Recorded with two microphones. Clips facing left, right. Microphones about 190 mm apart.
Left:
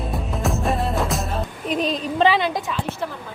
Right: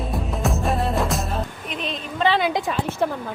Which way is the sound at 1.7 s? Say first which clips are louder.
Left 7 dB; 40° left (ahead or behind).